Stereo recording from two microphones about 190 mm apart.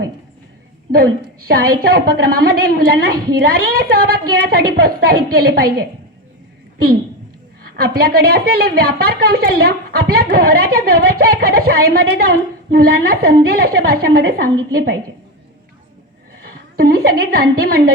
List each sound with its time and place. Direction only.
1.5 s a woman's voice: 50° right (ahead or behind)
7.8 s a woman's voice: 55° right (ahead or behind)
16.7 s a woman's voice: 55° right (ahead or behind)